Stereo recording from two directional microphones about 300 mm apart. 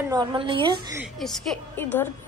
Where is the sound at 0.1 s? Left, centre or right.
Centre.